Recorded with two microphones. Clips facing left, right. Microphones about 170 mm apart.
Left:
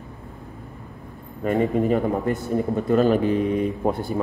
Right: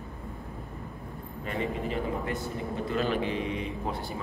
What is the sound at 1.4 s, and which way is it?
Speech, 45° left (ahead or behind).